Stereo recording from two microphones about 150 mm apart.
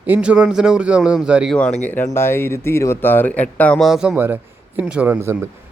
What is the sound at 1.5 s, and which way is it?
Speech, 5° left (ahead or behind).